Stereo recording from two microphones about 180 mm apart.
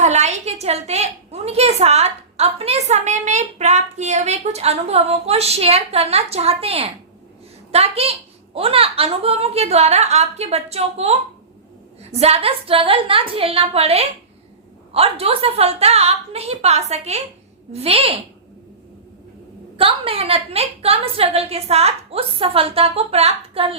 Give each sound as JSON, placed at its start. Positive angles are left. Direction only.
{"t": 0.0, "sound": "a woman's voice", "side_deg": -40}
{"t": 19.7, "sound": "a woman's voice", "side_deg": -30}